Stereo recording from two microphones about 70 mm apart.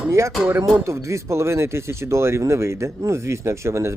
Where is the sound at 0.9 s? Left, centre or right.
Right.